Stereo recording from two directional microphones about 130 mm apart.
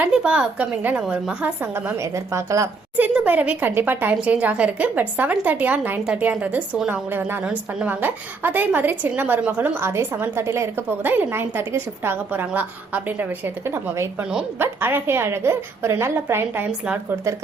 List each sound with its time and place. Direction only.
0.0 s a woman's voice: 10° right (ahead or behind)
3.2 s a woman's voice: 10° right (ahead or behind)